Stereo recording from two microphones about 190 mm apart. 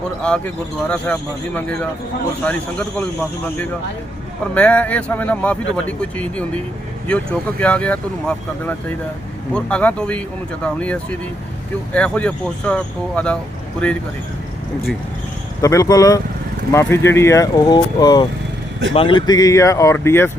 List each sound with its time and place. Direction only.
0.2 s speech: 5° left (ahead or behind)
15.6 s speech: 15° left (ahead or behind)